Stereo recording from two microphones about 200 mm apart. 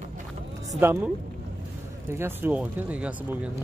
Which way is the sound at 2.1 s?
10° right (ahead or behind).